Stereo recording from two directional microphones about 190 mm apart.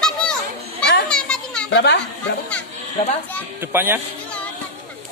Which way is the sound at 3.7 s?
10° right (ahead or behind).